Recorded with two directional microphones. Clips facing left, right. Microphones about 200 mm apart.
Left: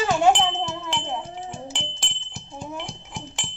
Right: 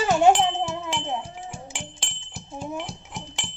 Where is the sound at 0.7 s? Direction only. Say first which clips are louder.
Right 1 dB; 5° right (ahead or behind).